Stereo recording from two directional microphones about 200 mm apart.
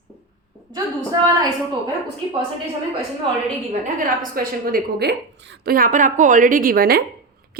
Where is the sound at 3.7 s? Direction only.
40° right (ahead or behind).